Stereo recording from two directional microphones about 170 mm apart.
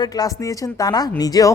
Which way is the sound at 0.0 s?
20° left (ahead or behind).